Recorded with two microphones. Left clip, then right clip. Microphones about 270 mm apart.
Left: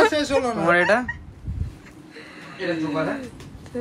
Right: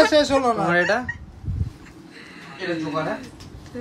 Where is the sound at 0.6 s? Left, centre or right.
Left.